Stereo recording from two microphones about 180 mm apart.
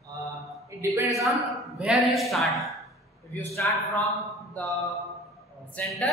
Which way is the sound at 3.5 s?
15° left (ahead or behind).